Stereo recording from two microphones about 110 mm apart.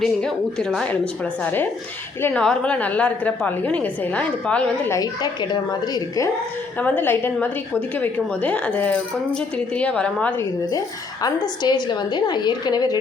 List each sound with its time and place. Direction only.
0.0 s a woman's voice: 5° left (ahead or behind)
4.9 s a woman's voice: 35° left (ahead or behind)
6.7 s a woman's voice: 15° left (ahead or behind)
10.7 s a woman's voice: 35° left (ahead or behind)